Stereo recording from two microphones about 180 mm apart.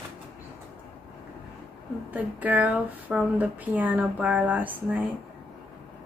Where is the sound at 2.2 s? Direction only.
10° right (ahead or behind).